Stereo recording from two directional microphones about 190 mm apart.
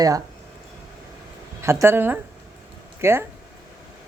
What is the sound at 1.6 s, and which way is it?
A woman's voice, 15° right (ahead or behind).